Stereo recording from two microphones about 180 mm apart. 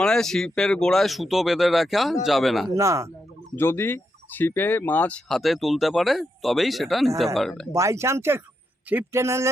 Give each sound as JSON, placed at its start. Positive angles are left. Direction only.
{"t": 0.0, "sound": "speech", "side_deg": 5}
{"t": 2.7, "sound": "speech", "side_deg": -15}
{"t": 3.5, "sound": "speech", "side_deg": 15}
{"t": 7.7, "sound": "speech", "side_deg": -15}